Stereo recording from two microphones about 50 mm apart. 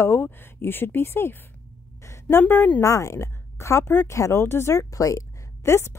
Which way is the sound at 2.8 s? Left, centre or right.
Left.